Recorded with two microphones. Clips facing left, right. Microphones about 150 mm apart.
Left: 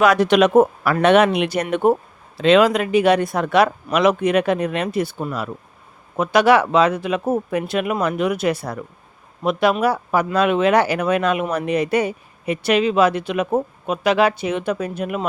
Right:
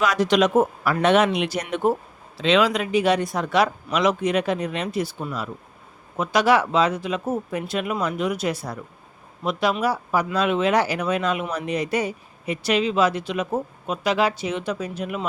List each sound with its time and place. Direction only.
0.0 s speech: 60° left (ahead or behind)